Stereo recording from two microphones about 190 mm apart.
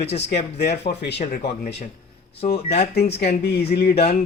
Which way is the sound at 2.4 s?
45° left (ahead or behind).